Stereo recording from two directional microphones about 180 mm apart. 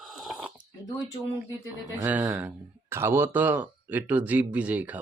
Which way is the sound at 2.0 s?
10° right (ahead or behind).